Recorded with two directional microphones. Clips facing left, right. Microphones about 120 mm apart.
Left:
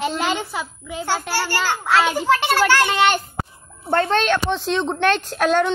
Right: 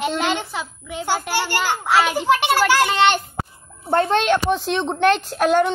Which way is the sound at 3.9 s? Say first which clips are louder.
Right 1 dB; 15° right (ahead or behind).